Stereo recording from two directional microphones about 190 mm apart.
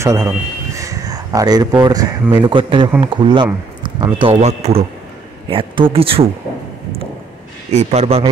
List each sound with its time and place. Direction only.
0.0 s a man's voice: 15° right (ahead or behind)
7.7 s a man's voice: 35° right (ahead or behind)